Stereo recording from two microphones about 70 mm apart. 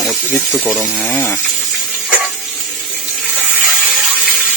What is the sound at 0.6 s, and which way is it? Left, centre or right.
Speech, left.